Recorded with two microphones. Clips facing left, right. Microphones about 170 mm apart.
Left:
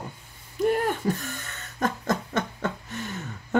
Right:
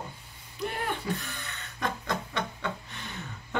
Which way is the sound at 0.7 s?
45° left (ahead or behind).